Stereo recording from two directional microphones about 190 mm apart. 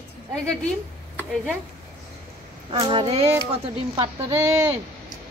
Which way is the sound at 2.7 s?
25° right (ahead or behind).